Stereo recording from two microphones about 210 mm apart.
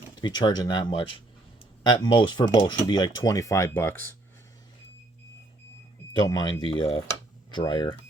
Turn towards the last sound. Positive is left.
turn(degrees=20)  # may be behind; listen again after turning